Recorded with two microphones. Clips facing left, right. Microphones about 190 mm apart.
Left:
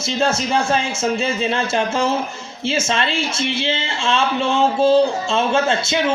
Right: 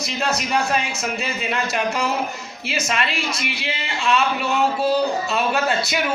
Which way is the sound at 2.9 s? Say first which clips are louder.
Left 3 dB; 30° left (ahead or behind).